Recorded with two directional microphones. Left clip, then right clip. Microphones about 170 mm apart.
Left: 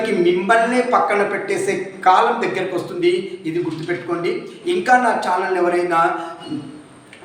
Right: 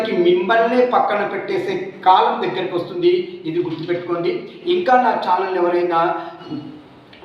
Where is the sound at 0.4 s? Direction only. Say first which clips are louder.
Right 1 dB; 15° left (ahead or behind).